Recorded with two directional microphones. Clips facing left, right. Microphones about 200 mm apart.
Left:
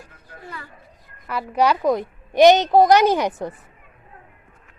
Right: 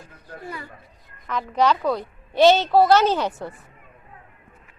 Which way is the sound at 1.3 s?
10° left (ahead or behind).